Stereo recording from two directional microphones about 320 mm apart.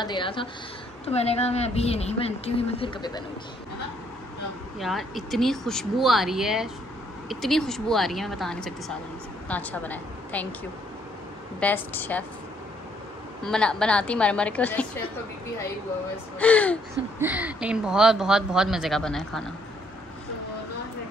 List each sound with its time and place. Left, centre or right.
0.0 s a woman's voice: centre
4.7 s speech: centre
11.6 s speech: centre
13.4 s speech: centre
16.3 s speech: centre